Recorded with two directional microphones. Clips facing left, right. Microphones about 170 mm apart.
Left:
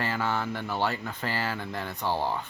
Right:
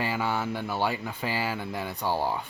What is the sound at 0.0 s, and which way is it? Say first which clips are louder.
Speech: right 1 dB; 15° right (ahead or behind).